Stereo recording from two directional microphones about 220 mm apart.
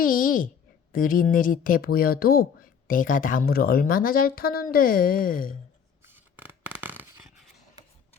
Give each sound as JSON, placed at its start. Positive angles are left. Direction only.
{"t": 0.0, "sound": "a woman's voice", "side_deg": 40}
{"t": 6.3, "sound": "scissors", "side_deg": -10}